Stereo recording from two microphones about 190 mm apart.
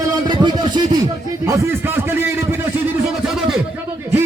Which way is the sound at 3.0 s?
Centre (ahead or behind).